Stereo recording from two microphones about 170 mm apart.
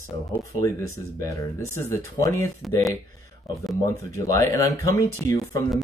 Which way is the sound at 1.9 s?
15° left (ahead or behind).